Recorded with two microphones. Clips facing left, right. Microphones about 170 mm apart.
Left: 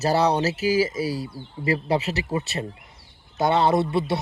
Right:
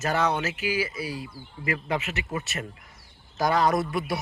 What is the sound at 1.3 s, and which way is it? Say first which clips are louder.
Speech: left 6 dB; 30° left (ahead or behind).